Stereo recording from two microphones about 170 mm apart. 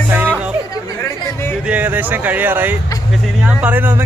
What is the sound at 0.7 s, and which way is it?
Speech, 15° left (ahead or behind).